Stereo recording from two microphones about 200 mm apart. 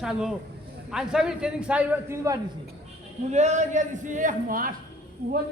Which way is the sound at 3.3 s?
35° right (ahead or behind).